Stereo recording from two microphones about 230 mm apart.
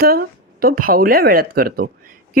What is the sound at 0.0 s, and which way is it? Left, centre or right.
Speech, right.